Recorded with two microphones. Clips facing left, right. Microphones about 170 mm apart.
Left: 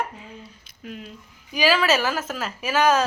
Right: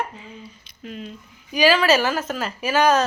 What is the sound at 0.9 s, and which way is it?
A woman's voice, 5° left (ahead or behind).